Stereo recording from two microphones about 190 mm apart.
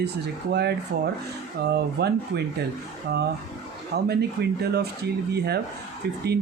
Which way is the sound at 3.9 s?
60° right (ahead or behind).